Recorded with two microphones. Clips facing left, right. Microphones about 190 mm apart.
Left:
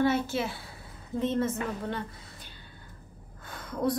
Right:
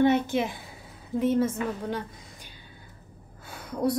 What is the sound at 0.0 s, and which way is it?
A woman's voice, 15° right (ahead or behind).